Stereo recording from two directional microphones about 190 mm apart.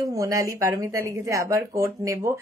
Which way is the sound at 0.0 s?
15° right (ahead or behind).